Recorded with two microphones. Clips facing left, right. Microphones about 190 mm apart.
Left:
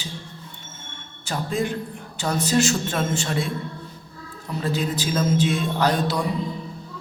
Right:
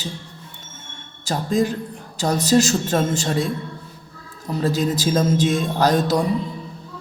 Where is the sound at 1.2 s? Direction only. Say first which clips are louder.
Right 5 dB; 40° right (ahead or behind).